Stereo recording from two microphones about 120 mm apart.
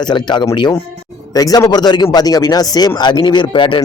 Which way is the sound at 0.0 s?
40° left (ahead or behind).